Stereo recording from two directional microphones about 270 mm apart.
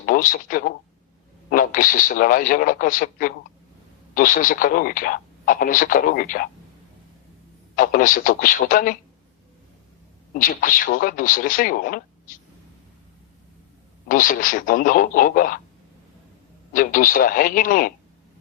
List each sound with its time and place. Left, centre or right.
0.0 s speech: left
7.8 s speech: left
10.3 s speech: left
14.1 s speech: left
16.7 s speech: left